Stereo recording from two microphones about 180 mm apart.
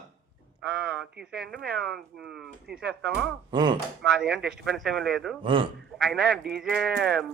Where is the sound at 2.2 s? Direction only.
Centre (ahead or behind).